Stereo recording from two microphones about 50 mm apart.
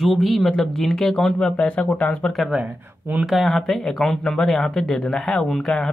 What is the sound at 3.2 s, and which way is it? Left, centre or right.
Speech, centre.